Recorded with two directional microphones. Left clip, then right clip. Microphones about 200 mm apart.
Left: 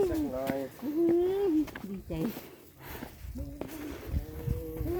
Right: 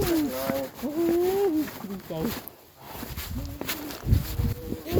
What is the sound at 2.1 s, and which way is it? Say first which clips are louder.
Speech: right 4 dB; 30° left (ahead or behind).